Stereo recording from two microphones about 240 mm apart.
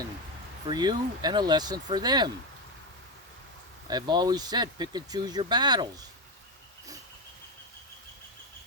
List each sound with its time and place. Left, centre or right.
0.7 s speech: centre
3.8 s speech: centre